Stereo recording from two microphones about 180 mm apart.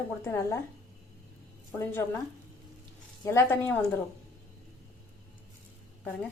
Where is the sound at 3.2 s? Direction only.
15° left (ahead or behind).